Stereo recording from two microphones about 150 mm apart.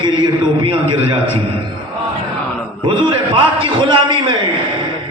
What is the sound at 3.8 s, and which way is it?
Speech, 30° right (ahead or behind).